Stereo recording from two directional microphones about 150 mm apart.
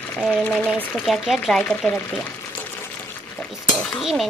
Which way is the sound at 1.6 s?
10° left (ahead or behind).